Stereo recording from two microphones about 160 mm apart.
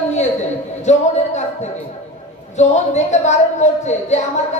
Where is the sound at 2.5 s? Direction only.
45° left (ahead or behind).